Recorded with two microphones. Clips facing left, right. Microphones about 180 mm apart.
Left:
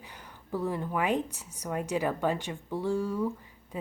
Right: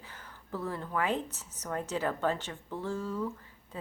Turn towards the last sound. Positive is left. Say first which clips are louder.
# left 5 dB
turn(degrees=10)  # may be behind; listen again after turning